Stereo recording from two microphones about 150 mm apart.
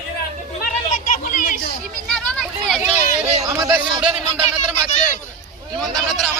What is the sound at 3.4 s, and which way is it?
Chatter, 20° right (ahead or behind).